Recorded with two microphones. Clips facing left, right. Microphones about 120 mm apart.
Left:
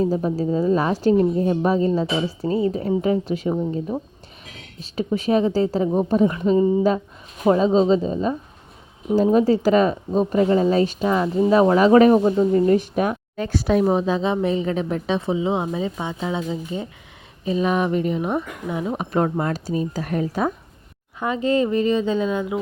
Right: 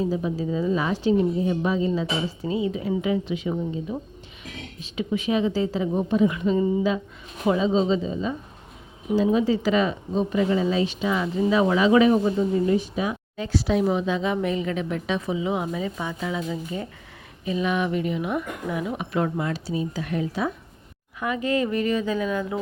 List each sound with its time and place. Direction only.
0.0 s a woman's voice: 40° left (ahead or behind)
21.2 s a woman's voice: 30° left (ahead or behind)